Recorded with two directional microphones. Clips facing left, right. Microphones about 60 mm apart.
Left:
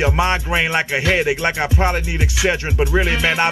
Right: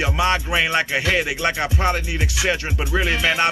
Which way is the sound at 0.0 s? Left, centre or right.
Left.